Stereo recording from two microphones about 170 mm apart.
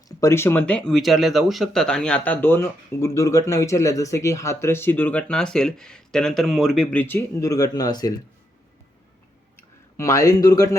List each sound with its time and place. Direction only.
0.1 s speech: 20° left (ahead or behind)
9.6 s speech: 15° left (ahead or behind)